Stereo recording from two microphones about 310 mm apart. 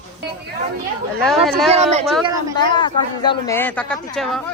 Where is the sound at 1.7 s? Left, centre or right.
Right.